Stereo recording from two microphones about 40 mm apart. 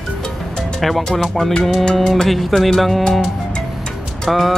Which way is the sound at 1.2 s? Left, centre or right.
Centre.